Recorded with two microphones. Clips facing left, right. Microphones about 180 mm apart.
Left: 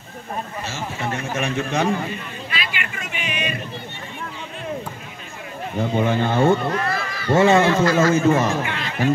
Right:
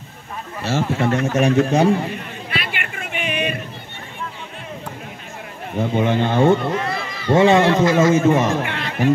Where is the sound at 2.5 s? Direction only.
55° right (ahead or behind).